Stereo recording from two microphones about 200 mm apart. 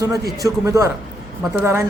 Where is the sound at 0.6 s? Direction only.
15° right (ahead or behind).